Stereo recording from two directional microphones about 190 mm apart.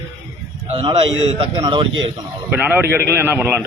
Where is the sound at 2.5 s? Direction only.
10° right (ahead or behind).